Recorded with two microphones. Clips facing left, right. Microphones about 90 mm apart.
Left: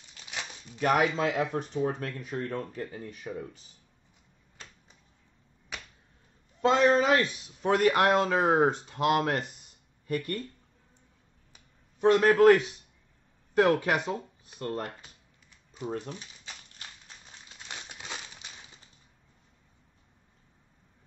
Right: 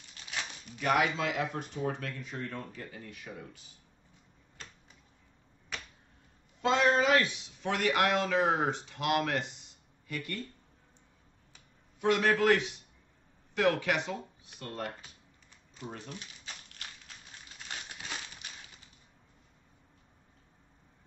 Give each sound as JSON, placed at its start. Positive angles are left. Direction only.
{"t": 0.7, "sound": "speech", "side_deg": 45}
{"t": 6.6, "sound": "speech", "side_deg": 40}
{"t": 12.0, "sound": "speech", "side_deg": 40}
{"t": 15.9, "sound": "speech", "side_deg": 30}
{"t": 17.9, "sound": "crumpling", "side_deg": 25}